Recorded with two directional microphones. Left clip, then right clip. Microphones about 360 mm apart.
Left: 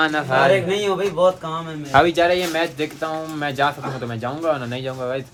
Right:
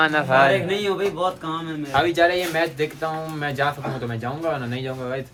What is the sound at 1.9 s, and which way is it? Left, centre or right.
Speech, centre.